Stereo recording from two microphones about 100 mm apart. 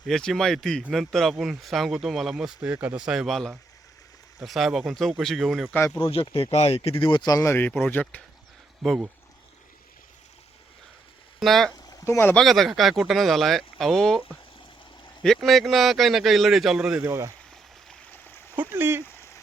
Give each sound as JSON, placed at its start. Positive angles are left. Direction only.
{"t": 0.1, "sound": "speech", "side_deg": 5}
{"t": 2.6, "sound": "speech", "side_deg": -15}
{"t": 5.7, "sound": "speech", "side_deg": 20}
{"t": 6.0, "sound": "speech", "side_deg": 65}
{"t": 7.2, "sound": "speech", "side_deg": 35}
{"t": 7.9, "sound": "speech", "side_deg": 20}
{"t": 11.3, "sound": "speech", "side_deg": 0}
{"t": 12.0, "sound": "speech", "side_deg": 25}
{"t": 12.3, "sound": "speech", "side_deg": 5}
{"t": 15.2, "sound": "speech", "side_deg": 0}
{"t": 17.1, "sound": "speech", "side_deg": -30}
{"t": 18.7, "sound": "speech", "side_deg": -20}
{"t": 19.0, "sound": "a sound", "side_deg": 30}